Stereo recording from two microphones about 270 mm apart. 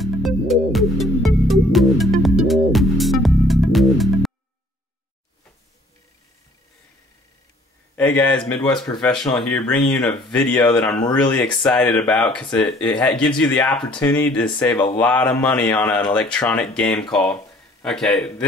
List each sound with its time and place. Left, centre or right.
0.0 s music: centre
7.9 s speech: centre
15.0 s mantra: centre
16.3 s speech: centre